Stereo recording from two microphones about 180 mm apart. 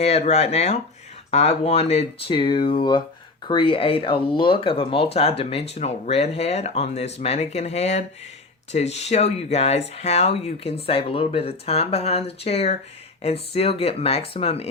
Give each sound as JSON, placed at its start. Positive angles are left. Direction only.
{"t": 0.0, "sound": "speech", "side_deg": 35}